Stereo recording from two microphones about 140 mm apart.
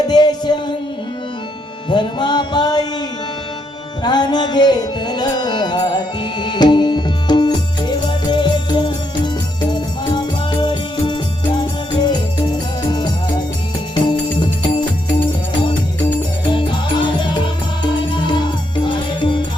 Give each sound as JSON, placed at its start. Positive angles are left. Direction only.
{"t": 0.1, "sound": "music", "side_deg": 30}
{"t": 1.9, "sound": "music", "side_deg": 35}
{"t": 4.0, "sound": "music", "side_deg": 30}
{"t": 16.5, "sound": "music", "side_deg": 35}